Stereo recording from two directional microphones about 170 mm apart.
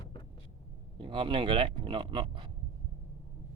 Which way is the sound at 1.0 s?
30° right (ahead or behind).